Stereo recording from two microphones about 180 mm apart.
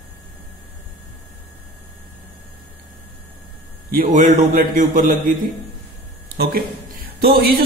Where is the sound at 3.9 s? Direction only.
45° right (ahead or behind).